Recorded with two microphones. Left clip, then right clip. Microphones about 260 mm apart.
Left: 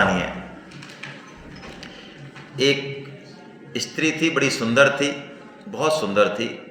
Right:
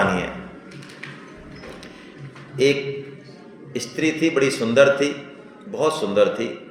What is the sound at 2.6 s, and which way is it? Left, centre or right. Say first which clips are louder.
Speech: right 1 dB; left.